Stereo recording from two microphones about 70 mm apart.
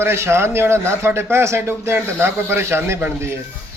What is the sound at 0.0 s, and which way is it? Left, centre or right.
A man's voice, right.